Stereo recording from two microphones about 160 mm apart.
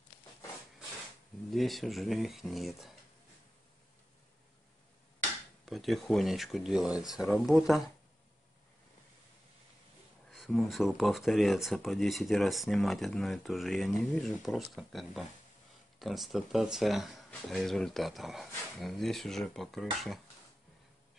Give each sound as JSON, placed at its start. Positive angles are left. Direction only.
{"t": 1.5, "sound": "speech", "side_deg": 0}
{"t": 5.7, "sound": "speech", "side_deg": 0}
{"t": 10.3, "sound": "speech", "side_deg": 0}